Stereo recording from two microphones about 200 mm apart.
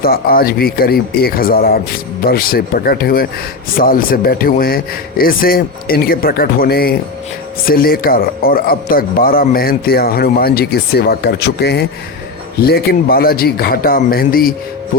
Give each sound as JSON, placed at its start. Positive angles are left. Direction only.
{"t": 0.0, "sound": "a man's voice", "side_deg": 50}